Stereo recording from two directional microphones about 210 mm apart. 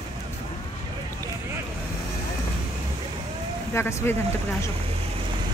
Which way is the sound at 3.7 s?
10° left (ahead or behind).